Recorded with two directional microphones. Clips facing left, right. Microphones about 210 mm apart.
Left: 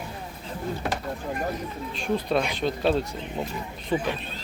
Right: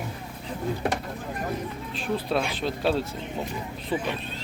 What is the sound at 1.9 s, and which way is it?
Speech, centre (ahead or behind).